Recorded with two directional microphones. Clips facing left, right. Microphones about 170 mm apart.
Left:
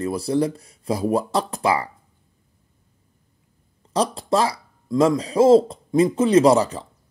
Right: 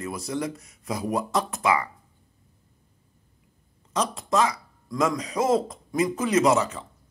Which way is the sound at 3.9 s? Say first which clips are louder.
Left 4 dB; 35° left (ahead or behind).